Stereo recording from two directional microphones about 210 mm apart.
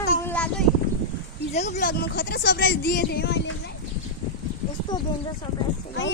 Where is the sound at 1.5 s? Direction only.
35° left (ahead or behind); by 3.5 s 55° left (ahead or behind).